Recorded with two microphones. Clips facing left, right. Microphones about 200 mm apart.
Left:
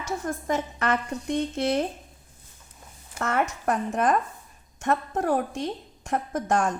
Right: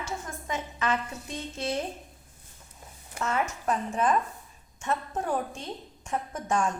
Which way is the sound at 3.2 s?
65° left (ahead or behind).